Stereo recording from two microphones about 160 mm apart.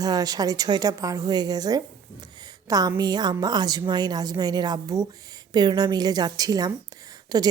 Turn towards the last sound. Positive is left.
turn(degrees=-25)  # may be behind; listen again after turning